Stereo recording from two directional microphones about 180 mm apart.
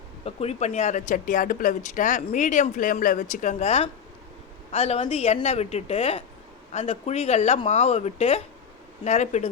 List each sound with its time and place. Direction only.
0.3 s speech: 35° left (ahead or behind)